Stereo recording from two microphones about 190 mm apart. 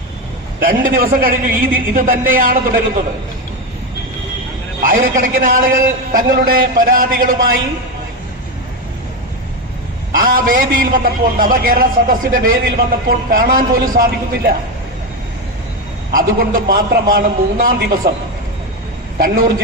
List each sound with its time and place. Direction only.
0.6 s a man's voice: 50° right (ahead or behind)
4.8 s a man's voice: 45° right (ahead or behind)
10.1 s a man's voice: 50° right (ahead or behind)
16.1 s a man's voice: 45° right (ahead or behind)
19.2 s a man's voice: 50° right (ahead or behind)